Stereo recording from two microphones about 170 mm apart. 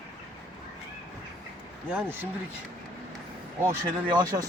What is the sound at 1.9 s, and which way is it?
Speech, 10° right (ahead or behind).